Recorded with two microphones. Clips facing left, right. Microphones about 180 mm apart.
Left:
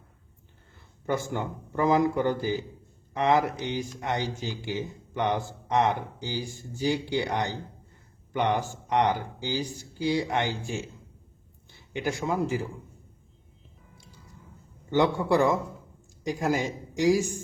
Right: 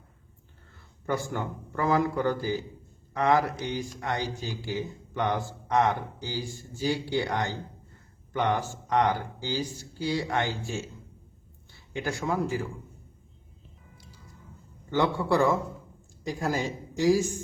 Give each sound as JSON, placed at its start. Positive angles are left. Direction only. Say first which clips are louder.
{"t": 1.0, "sound": "a man's voice", "louder": "left 1 dB", "side_deg": 20}
{"t": 14.8, "sound": "speech", "louder": "left 2 dB", "side_deg": 15}